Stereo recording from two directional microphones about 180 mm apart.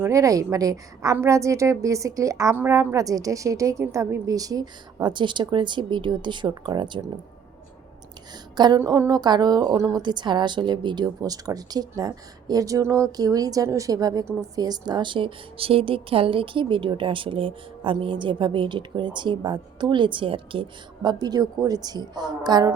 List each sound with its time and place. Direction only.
0.0 s a woman's voice: 15° right (ahead or behind)
8.5 s a woman's voice: 25° right (ahead or behind)